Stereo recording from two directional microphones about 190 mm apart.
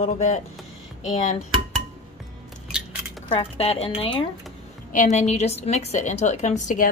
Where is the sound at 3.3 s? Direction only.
30° left (ahead or behind).